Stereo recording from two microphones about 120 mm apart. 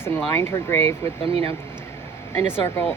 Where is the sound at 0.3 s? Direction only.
20° left (ahead or behind).